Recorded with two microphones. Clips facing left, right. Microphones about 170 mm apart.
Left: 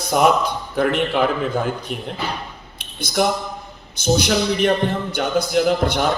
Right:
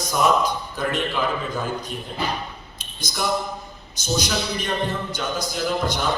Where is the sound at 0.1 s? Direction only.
65° left (ahead or behind).